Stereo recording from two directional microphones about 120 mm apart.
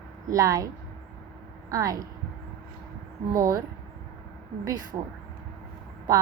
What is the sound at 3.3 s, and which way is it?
Speech, 25° right (ahead or behind).